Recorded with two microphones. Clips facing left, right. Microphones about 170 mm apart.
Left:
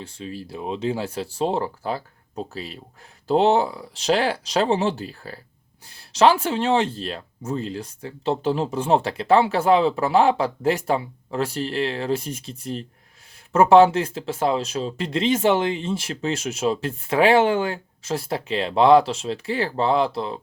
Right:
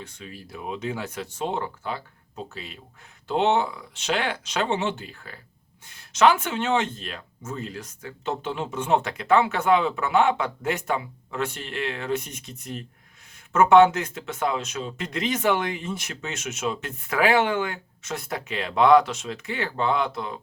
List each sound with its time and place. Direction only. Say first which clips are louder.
0.0 s speech: left 7 dB; 30° left (ahead or behind)